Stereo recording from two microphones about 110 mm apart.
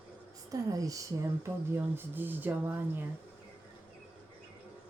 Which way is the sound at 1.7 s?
20° right (ahead or behind).